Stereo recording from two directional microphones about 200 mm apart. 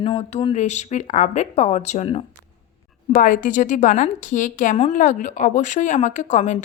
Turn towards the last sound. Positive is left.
turn(degrees=35)  # may be behind; listen again after turning